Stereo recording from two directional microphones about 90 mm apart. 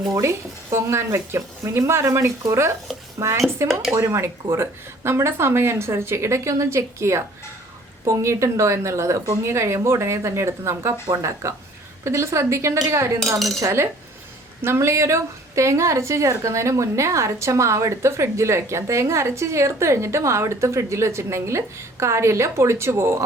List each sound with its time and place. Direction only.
0.1 s a woman's voice: 30° right (ahead or behind)